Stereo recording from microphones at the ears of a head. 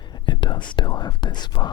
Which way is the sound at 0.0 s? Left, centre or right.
Left.